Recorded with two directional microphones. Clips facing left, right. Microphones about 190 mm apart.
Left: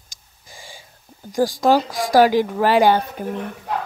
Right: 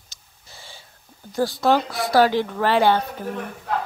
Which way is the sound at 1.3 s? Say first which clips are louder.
Left 3 dB; 15° left (ahead or behind).